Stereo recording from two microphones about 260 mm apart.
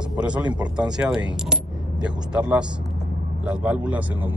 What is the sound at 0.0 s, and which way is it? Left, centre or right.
A man's voice, centre.